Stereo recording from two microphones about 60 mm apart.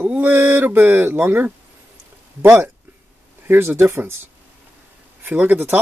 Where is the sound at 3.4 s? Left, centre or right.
Right.